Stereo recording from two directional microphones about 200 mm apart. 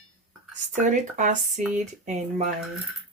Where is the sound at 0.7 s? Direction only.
40° right (ahead or behind).